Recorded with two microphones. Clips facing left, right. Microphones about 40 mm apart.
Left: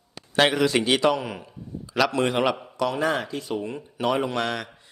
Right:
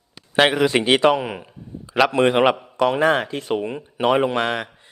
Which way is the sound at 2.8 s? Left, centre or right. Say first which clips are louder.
Right 7 dB; right.